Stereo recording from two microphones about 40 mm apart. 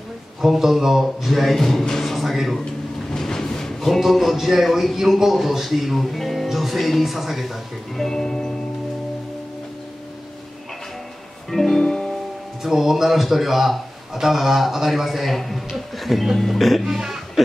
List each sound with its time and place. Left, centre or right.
0.4 s speech: centre
3.1 s a sound: centre
4.5 s speech: centre
11.5 s music: centre
11.8 s music: centre
12.6 s speech: centre